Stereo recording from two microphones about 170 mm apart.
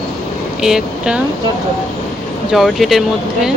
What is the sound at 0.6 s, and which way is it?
Speech, 5° right (ahead or behind).